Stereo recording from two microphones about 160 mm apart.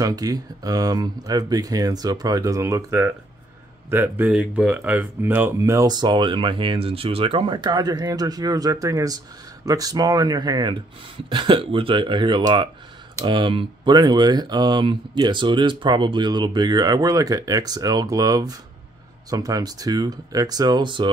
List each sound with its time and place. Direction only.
0.0 s speech: 25° right (ahead or behind)